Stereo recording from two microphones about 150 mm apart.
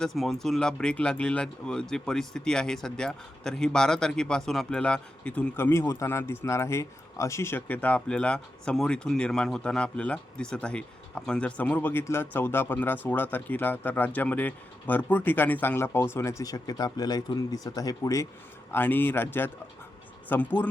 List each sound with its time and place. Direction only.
0.0 s speech: centre (ahead or behind)